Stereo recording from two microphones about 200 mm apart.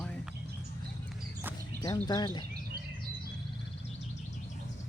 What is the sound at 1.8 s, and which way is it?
Speech, 20° left (ahead or behind).